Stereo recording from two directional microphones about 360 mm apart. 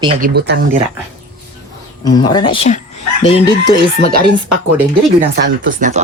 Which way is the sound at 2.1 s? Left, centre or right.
Centre.